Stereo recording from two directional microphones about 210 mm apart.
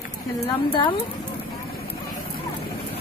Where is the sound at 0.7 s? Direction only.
20° left (ahead or behind).